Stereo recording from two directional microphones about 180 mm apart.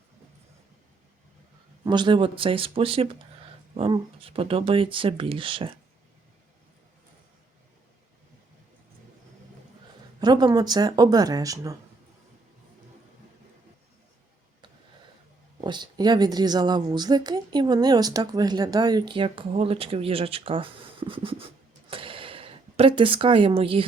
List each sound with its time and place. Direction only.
1.8 s speech: 25° right (ahead or behind)
10.2 s speech: 20° right (ahead or behind)
15.6 s speech: 25° right (ahead or behind)